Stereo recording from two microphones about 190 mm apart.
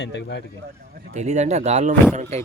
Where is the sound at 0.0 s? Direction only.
65° left (ahead or behind).